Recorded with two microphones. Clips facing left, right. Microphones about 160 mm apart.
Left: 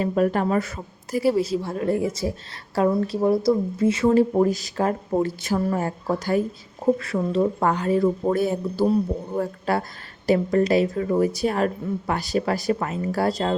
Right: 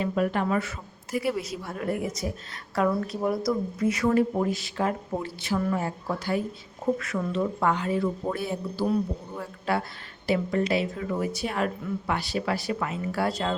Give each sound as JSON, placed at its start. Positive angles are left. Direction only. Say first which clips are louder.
{"t": 0.0, "sound": "a woman's voice", "louder": "left 5 dB", "side_deg": 40}